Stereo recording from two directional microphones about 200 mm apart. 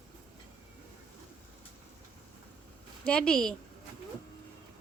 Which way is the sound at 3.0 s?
5° left (ahead or behind).